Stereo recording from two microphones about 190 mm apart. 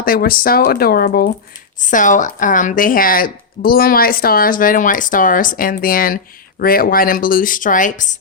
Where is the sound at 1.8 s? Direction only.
40° left (ahead or behind).